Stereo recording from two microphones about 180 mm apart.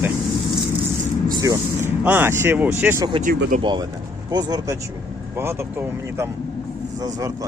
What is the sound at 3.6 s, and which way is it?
Speech, 25° right (ahead or behind).